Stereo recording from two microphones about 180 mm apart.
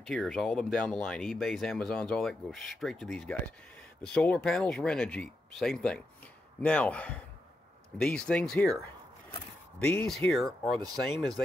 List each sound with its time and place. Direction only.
0.0 s speech: 5° left (ahead or behind)
9.8 s speech: 10° left (ahead or behind)